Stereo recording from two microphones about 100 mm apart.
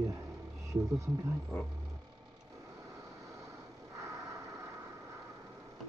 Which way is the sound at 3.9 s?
30° right (ahead or behind).